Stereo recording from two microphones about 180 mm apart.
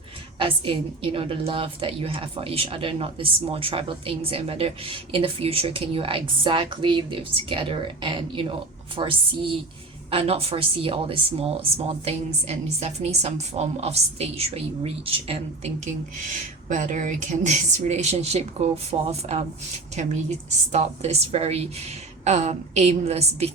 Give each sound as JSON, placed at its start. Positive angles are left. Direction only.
{"t": 0.3, "sound": "a woman's voice", "side_deg": -30}